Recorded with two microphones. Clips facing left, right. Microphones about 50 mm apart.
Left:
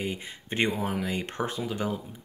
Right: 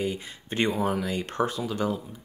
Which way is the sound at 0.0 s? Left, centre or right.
Left.